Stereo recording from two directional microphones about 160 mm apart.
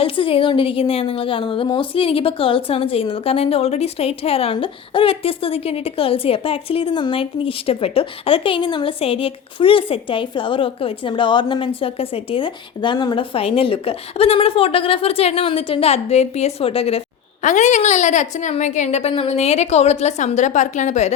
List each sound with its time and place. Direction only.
0.0 s a woman's voice: 35° left (ahead or behind)
17.4 s a woman's voice: 50° left (ahead or behind)